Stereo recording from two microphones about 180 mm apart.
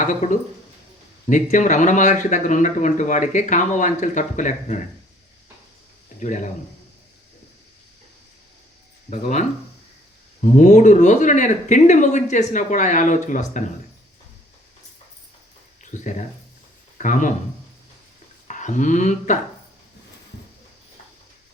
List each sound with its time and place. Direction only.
0.0 s speech: 45° left (ahead or behind)
6.1 s speech: 45° left (ahead or behind)
9.0 s speech: 40° left (ahead or behind)
15.8 s speech: 45° left (ahead or behind)
18.4 s speech: 40° left (ahead or behind)